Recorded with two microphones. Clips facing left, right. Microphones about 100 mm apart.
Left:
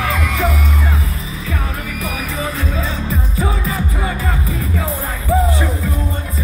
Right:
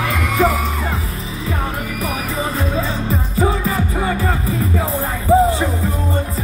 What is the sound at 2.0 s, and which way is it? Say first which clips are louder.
Music: right 1 dB; 30° right (ahead or behind).